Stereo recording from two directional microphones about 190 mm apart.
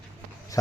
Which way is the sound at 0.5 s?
20° left (ahead or behind).